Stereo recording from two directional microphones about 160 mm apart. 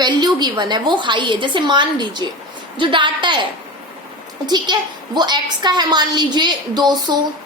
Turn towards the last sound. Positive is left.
turn(degrees=-25)  # may be behind; listen again after turning